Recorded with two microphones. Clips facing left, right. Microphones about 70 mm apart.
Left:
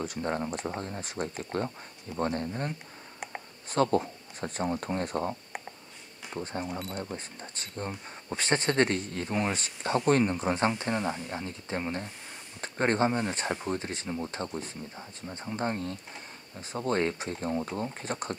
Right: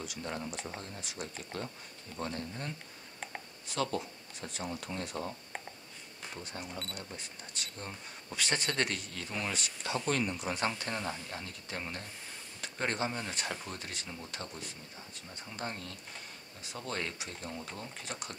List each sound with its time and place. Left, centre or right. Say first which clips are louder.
0.0 s speech: left 8 dB; left
6.3 s speech: left 9 dB; left